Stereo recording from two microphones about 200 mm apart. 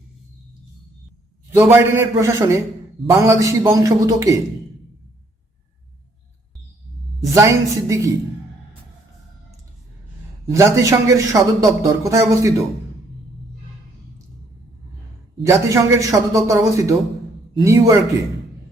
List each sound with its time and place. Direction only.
1.5 s a man's voice: 15° right (ahead or behind)
7.3 s a man's voice: 15° right (ahead or behind)
10.5 s a man's voice: 15° right (ahead or behind)
15.4 s a man's voice: 15° right (ahead or behind)